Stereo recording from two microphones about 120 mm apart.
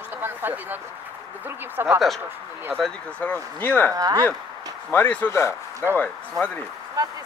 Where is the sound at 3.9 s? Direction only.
30° right (ahead or behind).